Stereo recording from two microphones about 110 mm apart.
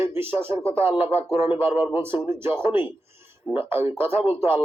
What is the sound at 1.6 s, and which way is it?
Speech, 65° left (ahead or behind).